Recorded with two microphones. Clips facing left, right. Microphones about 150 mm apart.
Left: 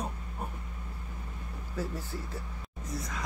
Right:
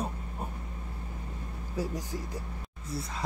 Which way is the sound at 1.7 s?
15° right (ahead or behind).